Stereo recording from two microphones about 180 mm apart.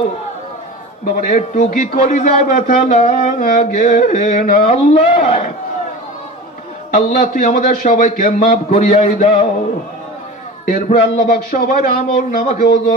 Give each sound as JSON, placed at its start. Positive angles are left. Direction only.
{"t": 1.0, "sound": "a man's voice", "side_deg": 45}
{"t": 4.9, "sound": "a man's voice", "side_deg": 30}
{"t": 6.9, "sound": "a man's voice", "side_deg": 50}
{"t": 10.7, "sound": "a man's voice", "side_deg": 55}